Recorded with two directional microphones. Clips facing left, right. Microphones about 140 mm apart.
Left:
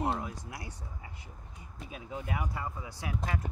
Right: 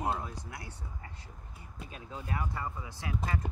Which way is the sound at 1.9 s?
10° left (ahead or behind).